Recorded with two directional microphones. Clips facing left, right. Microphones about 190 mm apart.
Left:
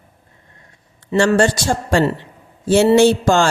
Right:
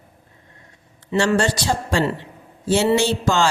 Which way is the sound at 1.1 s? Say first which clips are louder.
Left 4 dB; 50° left (ahead or behind).